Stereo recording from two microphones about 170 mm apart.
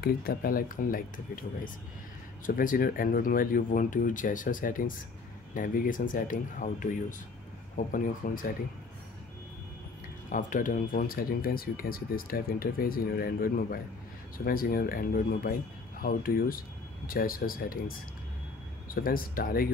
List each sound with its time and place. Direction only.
0.0 s speech: 60° left (ahead or behind)
10.3 s speech: 50° left (ahead or behind)